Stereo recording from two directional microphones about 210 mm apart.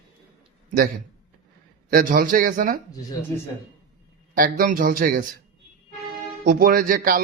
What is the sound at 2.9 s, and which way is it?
Speech, 15° left (ahead or behind).